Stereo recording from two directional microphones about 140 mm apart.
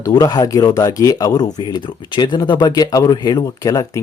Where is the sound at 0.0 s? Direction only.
25° left (ahead or behind).